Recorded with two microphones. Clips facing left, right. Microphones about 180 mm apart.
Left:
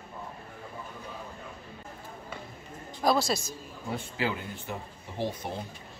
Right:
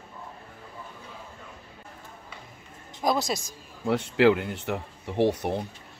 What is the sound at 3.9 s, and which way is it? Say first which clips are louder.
Speech: right 12 dB; 75° right (ahead or behind).